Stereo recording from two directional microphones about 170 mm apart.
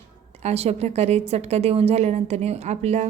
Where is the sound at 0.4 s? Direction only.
40° right (ahead or behind).